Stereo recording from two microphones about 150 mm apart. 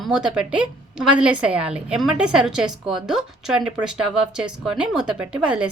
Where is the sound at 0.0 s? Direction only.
5° right (ahead or behind).